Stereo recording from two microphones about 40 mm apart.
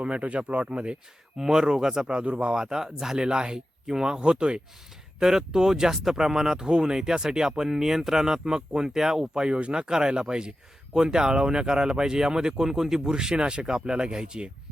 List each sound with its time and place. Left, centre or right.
0.0 s speech: right
1.4 s speech: centre
2.1 s speech: right
2.6 s speech: centre
3.2 s speech: right
5.2 s speech: centre